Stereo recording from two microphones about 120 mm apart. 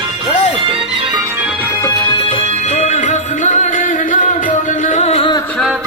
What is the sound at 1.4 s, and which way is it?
Music, 10° right (ahead or behind).